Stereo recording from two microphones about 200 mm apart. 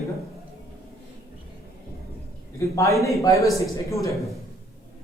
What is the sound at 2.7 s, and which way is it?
Speech, 15° left (ahead or behind).